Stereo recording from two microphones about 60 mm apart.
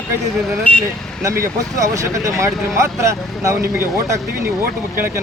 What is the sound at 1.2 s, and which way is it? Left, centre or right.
Speech, right.